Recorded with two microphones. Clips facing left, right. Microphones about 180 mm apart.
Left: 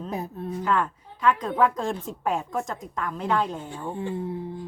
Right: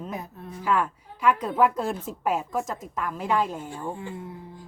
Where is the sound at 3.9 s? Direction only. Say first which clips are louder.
Left 7 dB; 30° left (ahead or behind).